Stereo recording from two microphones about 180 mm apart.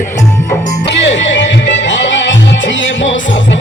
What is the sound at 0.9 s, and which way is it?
Music, 80° left.